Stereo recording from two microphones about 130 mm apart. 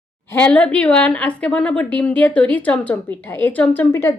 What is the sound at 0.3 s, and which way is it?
A woman's voice, 10° left (ahead or behind).